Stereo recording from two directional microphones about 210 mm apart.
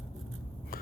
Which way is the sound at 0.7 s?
45° left (ahead or behind).